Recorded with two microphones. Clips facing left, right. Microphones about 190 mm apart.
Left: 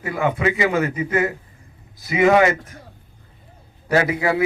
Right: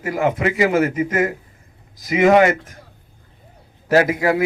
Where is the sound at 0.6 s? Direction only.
45° right (ahead or behind).